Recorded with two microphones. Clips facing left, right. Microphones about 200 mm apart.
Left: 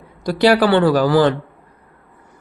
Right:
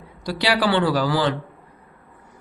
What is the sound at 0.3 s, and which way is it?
Speech, 50° left (ahead or behind).